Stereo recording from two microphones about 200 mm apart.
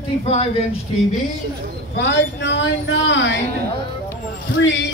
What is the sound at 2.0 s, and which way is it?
Speech, 60° left (ahead or behind).